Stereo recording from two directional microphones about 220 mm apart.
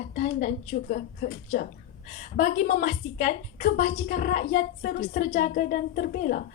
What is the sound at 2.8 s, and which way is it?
A woman's voice, 35° left (ahead or behind).